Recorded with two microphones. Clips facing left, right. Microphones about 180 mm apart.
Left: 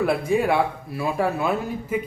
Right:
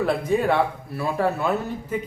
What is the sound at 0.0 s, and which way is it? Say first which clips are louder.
Speech: left 1 dB; 10° left (ahead or behind).